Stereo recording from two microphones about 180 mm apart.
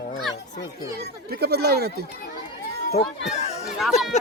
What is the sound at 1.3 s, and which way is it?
Speech, 65° right (ahead or behind).